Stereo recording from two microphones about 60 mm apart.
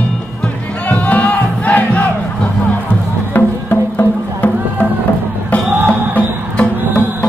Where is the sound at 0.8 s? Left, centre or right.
Left.